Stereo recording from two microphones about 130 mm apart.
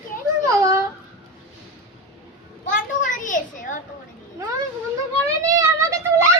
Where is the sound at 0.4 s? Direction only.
25° right (ahead or behind).